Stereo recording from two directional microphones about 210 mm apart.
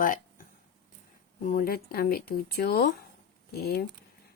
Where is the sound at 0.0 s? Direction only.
40° left (ahead or behind).